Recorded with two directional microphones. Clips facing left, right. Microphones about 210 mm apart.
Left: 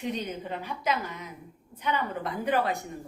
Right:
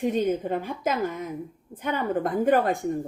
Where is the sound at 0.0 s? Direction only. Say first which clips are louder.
Right 9 dB; 50° right (ahead or behind).